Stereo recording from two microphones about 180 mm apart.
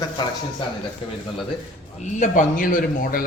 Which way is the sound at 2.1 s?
50° left (ahead or behind).